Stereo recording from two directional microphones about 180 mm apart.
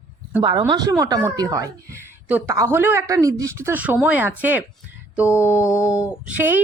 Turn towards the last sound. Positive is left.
turn(degrees=-10)  # may be behind; listen again after turning